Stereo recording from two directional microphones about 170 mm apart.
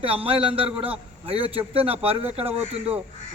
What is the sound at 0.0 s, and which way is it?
A man's voice, 35° right (ahead or behind).